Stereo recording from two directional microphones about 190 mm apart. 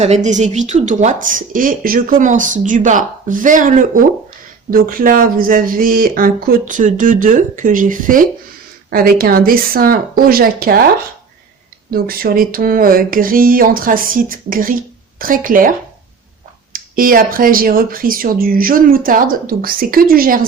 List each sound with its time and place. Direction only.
0.0 s speech: 35° right (ahead or behind)
11.9 s speech: 50° right (ahead or behind)
16.7 s speech: 50° right (ahead or behind)